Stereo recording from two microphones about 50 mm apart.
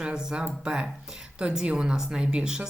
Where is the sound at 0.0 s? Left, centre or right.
Centre.